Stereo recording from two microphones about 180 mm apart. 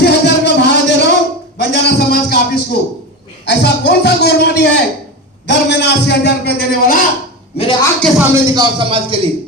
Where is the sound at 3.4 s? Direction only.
70° left (ahead or behind).